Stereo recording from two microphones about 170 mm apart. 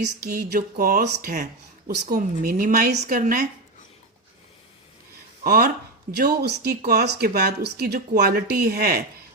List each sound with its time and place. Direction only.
0.0 s speech: 65° right (ahead or behind)
3.1 s speech: 55° right (ahead or behind)
5.4 s speech: 60° right (ahead or behind)